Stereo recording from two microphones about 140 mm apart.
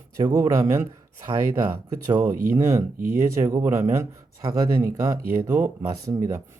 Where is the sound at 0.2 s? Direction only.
25° right (ahead or behind).